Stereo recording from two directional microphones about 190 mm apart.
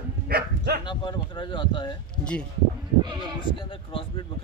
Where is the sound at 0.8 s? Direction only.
25° left (ahead or behind).